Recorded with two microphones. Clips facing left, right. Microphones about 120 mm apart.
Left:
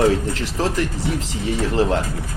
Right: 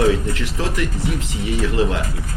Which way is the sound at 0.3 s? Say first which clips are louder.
Left 2 dB; 35° left (ahead or behind).